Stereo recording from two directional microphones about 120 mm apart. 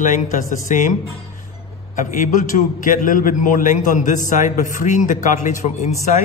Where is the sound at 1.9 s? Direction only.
90° left; by 5.9 s 70° left (ahead or behind).